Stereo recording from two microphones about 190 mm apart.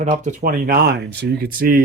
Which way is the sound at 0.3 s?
50° right (ahead or behind).